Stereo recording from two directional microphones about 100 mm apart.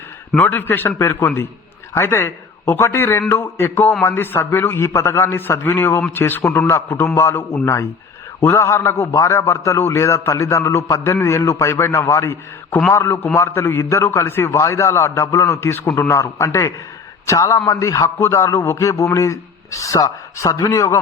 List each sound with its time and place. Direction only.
0.3 s a man's voice: 15° left (ahead or behind); by 21.0 s 30° left (ahead or behind)